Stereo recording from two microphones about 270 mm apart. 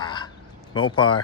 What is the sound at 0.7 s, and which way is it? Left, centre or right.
Speech, centre.